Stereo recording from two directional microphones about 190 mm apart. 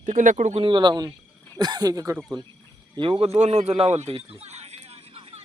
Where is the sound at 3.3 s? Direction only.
35° right (ahead or behind).